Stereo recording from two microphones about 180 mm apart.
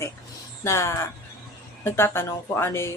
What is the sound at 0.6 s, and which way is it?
Speech, 15° left (ahead or behind).